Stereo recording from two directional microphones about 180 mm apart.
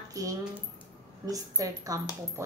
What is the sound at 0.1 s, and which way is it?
Speech, 20° right (ahead or behind).